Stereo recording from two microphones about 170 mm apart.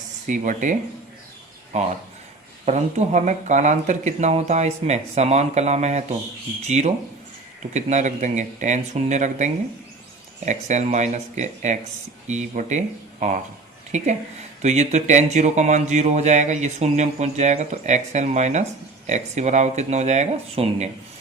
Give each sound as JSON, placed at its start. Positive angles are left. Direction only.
{"t": 0.3, "sound": "speech", "side_deg": -50}